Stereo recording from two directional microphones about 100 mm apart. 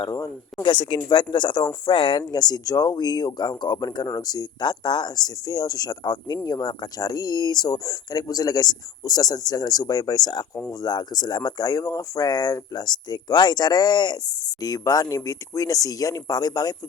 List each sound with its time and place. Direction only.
0.0 s speech: 40° left (ahead or behind)
0.6 s speech: 55° left (ahead or behind)